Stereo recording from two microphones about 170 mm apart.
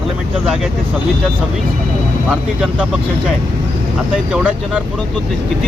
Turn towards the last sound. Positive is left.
turn(degrees=-10)  # may be behind; listen again after turning